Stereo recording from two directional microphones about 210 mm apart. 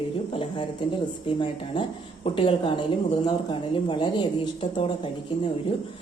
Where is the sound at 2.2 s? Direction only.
25° left (ahead or behind).